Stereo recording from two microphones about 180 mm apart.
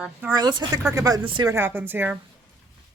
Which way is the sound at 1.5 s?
10° right (ahead or behind).